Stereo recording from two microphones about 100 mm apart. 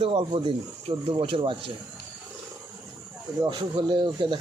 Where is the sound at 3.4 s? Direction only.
55° right (ahead or behind).